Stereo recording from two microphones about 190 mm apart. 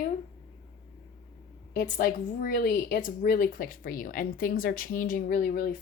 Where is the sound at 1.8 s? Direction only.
50° left (ahead or behind).